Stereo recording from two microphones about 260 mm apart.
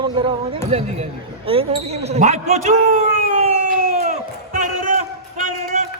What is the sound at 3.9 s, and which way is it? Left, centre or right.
Crowd, right.